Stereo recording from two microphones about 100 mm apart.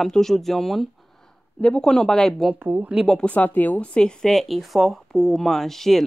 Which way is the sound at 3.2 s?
15° left (ahead or behind).